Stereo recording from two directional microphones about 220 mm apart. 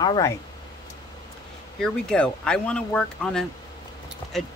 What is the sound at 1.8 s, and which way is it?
Speech, 5° left (ahead or behind).